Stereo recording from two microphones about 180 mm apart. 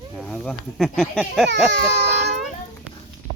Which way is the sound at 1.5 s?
70° right (ahead or behind).